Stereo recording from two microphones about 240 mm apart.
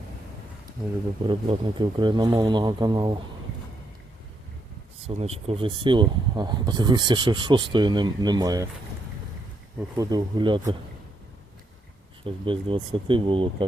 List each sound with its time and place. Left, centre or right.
1.3 s speech: centre
5.0 s speech: right
10.0 s speech: centre
12.2 s speech: right